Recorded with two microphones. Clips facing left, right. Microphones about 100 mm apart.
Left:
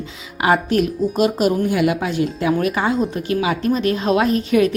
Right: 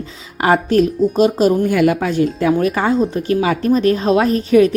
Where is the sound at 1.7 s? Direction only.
45° right (ahead or behind).